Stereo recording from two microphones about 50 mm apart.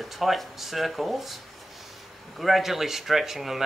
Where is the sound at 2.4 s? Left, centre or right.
Centre.